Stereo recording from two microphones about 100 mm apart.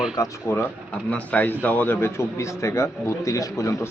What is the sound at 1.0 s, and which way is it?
A man's voice, 15° left (ahead or behind).